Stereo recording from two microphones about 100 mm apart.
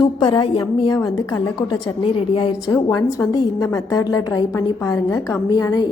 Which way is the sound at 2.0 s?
65° left (ahead or behind).